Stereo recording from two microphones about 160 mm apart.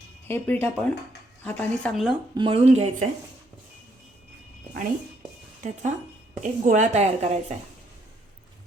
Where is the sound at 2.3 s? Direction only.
30° right (ahead or behind).